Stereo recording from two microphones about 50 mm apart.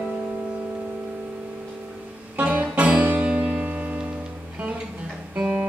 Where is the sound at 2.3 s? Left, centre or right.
Right.